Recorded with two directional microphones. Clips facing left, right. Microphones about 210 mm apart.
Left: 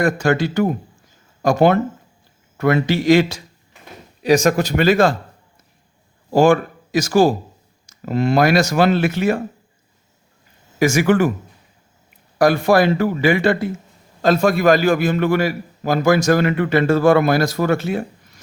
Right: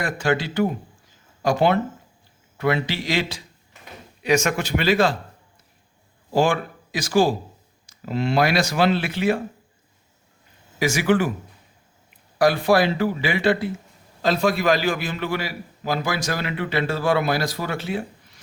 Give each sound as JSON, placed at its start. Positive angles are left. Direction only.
{"t": 0.0, "sound": "a man's voice", "side_deg": 45}
{"t": 6.3, "sound": "a man's voice", "side_deg": 45}
{"t": 10.8, "sound": "a man's voice", "side_deg": 45}
{"t": 12.4, "sound": "a man's voice", "side_deg": 45}